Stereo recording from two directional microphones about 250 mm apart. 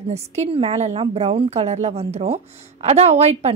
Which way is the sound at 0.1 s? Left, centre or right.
Right.